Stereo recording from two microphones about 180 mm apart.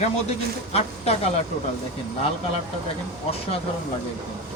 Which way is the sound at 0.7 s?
35° left (ahead or behind).